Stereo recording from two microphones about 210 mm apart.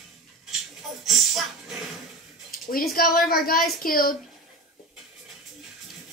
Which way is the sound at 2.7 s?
45° left (ahead or behind).